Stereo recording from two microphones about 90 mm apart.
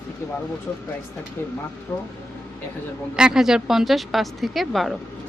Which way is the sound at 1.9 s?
20° left (ahead or behind).